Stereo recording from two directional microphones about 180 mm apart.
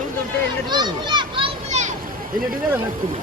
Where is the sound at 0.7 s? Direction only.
25° right (ahead or behind); by 2.0 s 40° right (ahead or behind).